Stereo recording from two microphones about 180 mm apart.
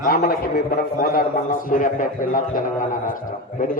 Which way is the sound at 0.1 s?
60° left (ahead or behind).